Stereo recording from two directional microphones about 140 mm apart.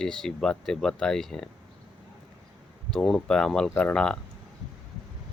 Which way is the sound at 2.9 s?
5° left (ahead or behind).